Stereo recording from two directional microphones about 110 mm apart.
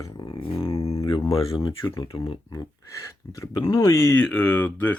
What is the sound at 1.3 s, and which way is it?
Speech, 60° left (ahead or behind).